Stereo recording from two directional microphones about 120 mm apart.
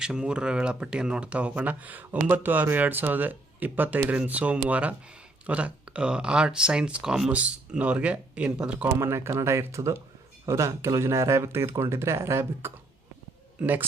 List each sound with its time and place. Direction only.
0.0 s speech: 5° right (ahead or behind)
8.9 s speech: 20° right (ahead or behind)